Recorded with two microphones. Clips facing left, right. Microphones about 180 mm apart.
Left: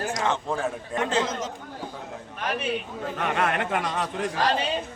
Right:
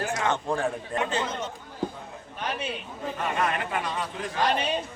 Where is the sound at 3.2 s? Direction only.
70° left (ahead or behind).